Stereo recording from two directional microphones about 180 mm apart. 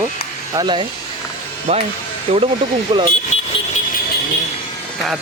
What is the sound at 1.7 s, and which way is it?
Speech, 35° right (ahead or behind).